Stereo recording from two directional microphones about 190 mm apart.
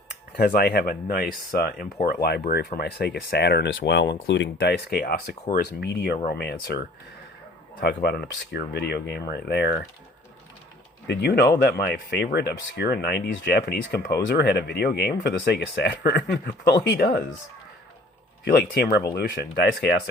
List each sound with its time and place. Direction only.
0.3 s speech: 55° left (ahead or behind)
11.0 s speech: 60° left (ahead or behind)
18.4 s speech: 55° left (ahead or behind)